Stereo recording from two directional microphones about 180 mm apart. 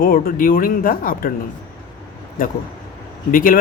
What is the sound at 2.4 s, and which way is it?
Speech, 50° left (ahead or behind).